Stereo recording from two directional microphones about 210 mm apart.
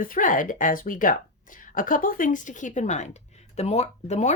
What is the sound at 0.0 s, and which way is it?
Speech, 40° left (ahead or behind).